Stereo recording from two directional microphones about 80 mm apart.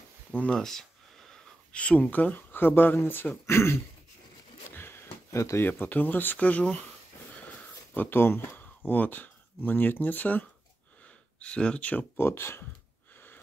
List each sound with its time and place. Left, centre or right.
0.3 s speech: centre; by 3.7 s left
4.6 s a sound: left
5.7 s speech: left
12.2 s speech: left
13.1 s gasp: left